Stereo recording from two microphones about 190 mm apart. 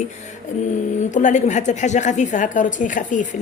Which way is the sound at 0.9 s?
40° left (ahead or behind).